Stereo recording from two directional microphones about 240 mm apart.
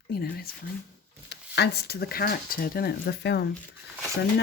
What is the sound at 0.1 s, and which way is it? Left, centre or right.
Speech, left.